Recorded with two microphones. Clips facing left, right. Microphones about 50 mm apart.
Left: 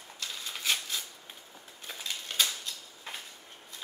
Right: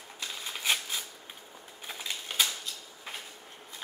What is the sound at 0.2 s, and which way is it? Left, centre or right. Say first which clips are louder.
Shuffling cards: right 1 dB; centre.